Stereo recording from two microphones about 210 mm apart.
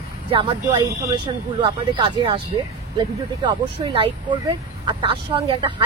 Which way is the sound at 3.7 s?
25° right (ahead or behind).